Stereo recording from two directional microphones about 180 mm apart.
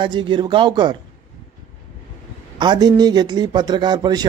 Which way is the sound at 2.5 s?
25° right (ahead or behind).